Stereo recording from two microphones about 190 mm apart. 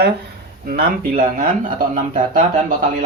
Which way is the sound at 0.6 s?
50° right (ahead or behind).